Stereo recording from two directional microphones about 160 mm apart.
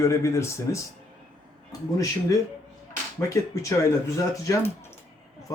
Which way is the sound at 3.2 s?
20° left (ahead or behind).